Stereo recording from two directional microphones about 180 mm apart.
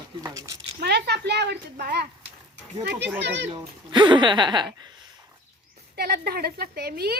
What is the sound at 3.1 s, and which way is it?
Speech, 75° right (ahead or behind).